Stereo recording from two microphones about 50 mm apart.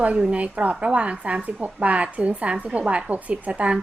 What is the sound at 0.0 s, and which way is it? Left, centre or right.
A woman's voice, right.